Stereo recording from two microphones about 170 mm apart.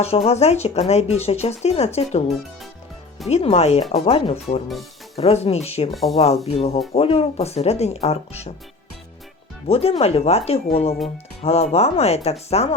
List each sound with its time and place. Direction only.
0.0 s speech: 40° left (ahead or behind)
3.2 s speech: 40° left (ahead or behind)
5.9 s speech: centre (ahead or behind)
6.1 s speech: 35° left (ahead or behind)
9.6 s speech: 35° left (ahead or behind)